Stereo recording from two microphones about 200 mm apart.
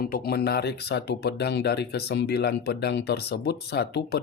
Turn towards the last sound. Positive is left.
turn(degrees=55)  # may be behind; listen again after turning